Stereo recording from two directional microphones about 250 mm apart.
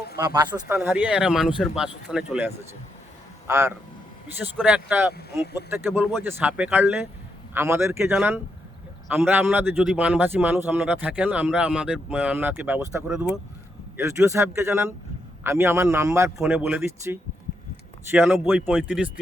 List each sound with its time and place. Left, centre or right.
0.2 s speech: centre
5.1 s speech: left
6.0 s a man's voice: centre